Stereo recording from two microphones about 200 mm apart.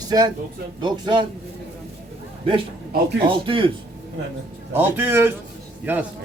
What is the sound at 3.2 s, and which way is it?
Speech, 25° right (ahead or behind).